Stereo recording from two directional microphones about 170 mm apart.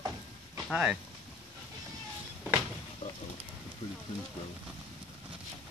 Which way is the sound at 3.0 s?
40° left (ahead or behind).